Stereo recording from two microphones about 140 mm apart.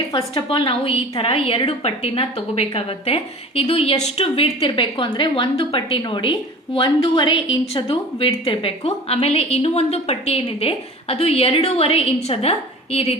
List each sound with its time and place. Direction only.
0.1 s a woman's voice: 35° left (ahead or behind)